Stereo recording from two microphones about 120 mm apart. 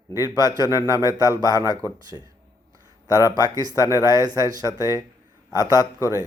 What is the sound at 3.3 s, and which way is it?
Speech, 30° right (ahead or behind).